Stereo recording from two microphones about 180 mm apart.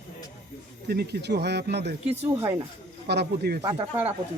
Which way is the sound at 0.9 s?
60° right (ahead or behind).